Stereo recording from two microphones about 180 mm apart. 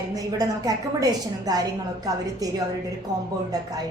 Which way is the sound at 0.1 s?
20° right (ahead or behind).